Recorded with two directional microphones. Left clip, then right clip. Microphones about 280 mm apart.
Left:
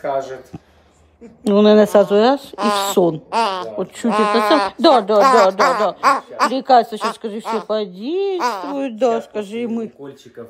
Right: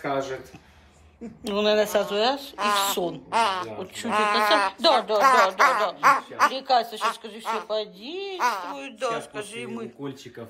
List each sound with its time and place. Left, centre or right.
1.4 s a woman's voice: left